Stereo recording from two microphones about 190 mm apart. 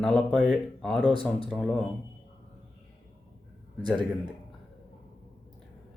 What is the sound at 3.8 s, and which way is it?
Speech, 20° right (ahead or behind).